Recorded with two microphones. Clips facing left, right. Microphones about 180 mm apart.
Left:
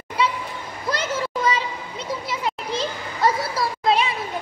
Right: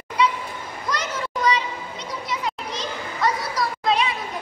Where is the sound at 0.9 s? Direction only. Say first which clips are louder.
Left 3 dB; 30° left (ahead or behind).